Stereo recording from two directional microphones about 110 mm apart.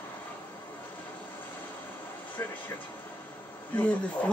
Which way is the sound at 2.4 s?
20° left (ahead or behind).